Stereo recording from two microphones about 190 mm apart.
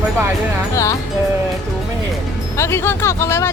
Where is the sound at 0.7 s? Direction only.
15° left (ahead or behind).